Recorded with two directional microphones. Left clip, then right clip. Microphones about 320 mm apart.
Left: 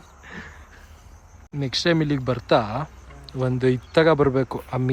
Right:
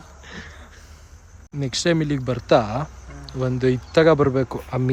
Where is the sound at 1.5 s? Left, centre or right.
Centre.